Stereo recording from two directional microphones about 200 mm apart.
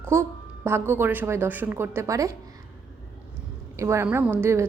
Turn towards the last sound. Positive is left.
turn(degrees=-10)  # may be behind; listen again after turning